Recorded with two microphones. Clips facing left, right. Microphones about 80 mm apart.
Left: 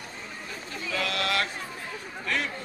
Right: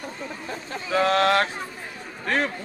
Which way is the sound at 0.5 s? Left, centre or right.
Right.